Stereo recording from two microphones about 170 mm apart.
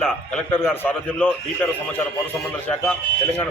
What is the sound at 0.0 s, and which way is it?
A man's voice, 10° left (ahead or behind).